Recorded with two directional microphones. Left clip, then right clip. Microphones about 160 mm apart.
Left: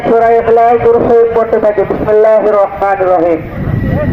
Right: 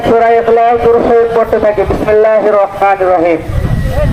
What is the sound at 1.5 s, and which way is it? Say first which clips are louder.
Speech: even; 15° right (ahead or behind).